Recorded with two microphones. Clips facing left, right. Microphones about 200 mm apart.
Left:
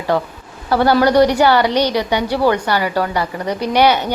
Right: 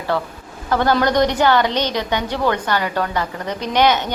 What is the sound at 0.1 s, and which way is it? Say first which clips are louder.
A woman's voice: left 4 dB; 15° left (ahead or behind).